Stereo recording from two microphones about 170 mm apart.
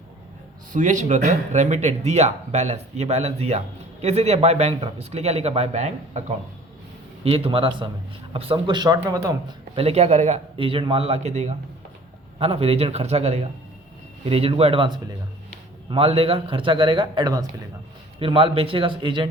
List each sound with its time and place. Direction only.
0.7 s a man's voice: 50° right (ahead or behind); by 19.3 s 30° right (ahead or behind)